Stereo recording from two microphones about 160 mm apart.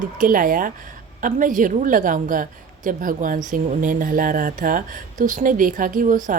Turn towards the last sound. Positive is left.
turn(degrees=-55)  # may be behind; listen again after turning